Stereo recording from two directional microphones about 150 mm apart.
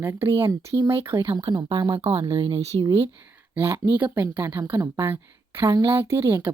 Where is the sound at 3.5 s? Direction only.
15° right (ahead or behind).